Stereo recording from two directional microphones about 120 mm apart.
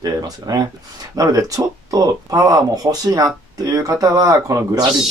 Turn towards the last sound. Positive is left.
turn(degrees=-30)  # may be behind; listen again after turning